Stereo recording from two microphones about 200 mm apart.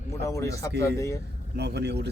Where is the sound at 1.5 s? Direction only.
55° right (ahead or behind).